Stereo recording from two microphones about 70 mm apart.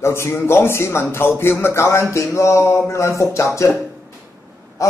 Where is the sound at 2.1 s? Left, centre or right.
Left.